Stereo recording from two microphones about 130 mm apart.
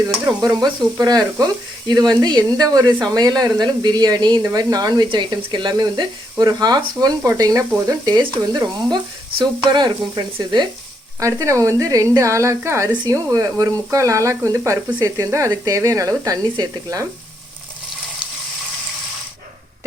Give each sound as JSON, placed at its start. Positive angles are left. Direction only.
{"t": 0.0, "sound": "speech", "side_deg": -30}
{"t": 9.4, "sound": "speech", "side_deg": -35}
{"t": 11.2, "sound": "speech", "side_deg": -25}